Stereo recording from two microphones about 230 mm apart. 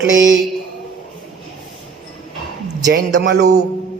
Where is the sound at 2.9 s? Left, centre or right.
Right.